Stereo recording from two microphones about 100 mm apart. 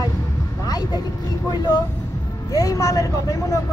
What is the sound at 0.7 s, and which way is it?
Vehicle, 40° left (ahead or behind).